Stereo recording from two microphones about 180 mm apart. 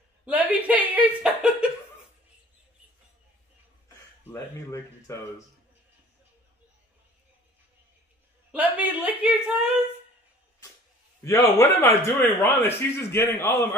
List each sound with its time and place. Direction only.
0.2 s chuckle: 10° right (ahead or behind)
4.3 s speech: 15° left (ahead or behind)
8.5 s a sound: 10° right (ahead or behind)
11.2 s speech: 15° left (ahead or behind)